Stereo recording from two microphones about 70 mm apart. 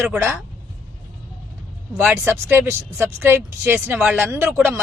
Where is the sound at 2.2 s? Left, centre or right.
Right.